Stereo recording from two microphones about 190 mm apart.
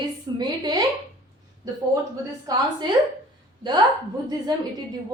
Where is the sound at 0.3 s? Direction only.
20° right (ahead or behind).